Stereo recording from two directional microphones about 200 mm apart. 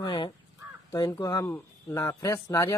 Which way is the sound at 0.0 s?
25° left (ahead or behind).